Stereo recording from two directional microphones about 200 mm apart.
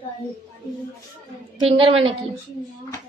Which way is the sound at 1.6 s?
30° right (ahead or behind).